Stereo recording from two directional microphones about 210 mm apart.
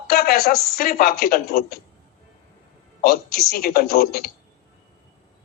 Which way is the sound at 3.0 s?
45° left (ahead or behind).